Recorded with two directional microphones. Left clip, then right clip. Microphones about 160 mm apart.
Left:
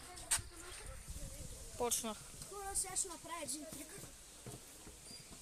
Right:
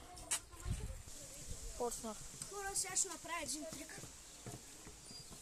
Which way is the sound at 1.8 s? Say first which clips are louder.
Left 3 dB; 15° left (ahead or behind).